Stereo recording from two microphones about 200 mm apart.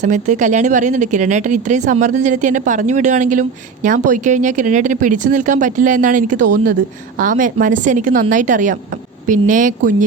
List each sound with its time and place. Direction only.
0.0 s speech: 35° right (ahead or behind)